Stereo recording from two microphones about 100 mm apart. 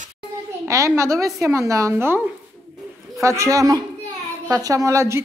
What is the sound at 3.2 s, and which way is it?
A woman's voice, 30° right (ahead or behind).